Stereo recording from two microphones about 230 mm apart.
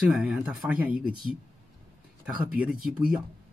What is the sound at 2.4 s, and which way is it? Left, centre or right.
Speech, centre.